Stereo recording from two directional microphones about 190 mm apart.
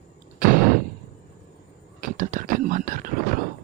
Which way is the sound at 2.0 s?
45° right (ahead or behind).